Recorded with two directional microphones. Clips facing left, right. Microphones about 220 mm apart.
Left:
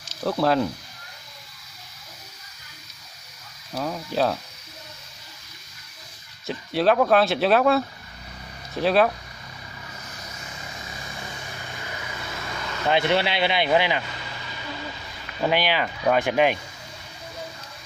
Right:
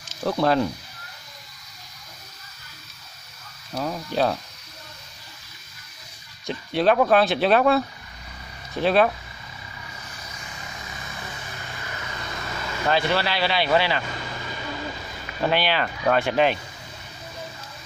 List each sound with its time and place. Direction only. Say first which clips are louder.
0.2 s speech: even; centre (ahead or behind)
3.7 s speech: even; 5° left (ahead or behind)
6.4 s speech: even; centre (ahead or behind)
11.9 s vehicle: right 1 dB; 10° left (ahead or behind)
12.8 s speech: left 1 dB; 20° left (ahead or behind)
15.4 s speech: even; 15° left (ahead or behind)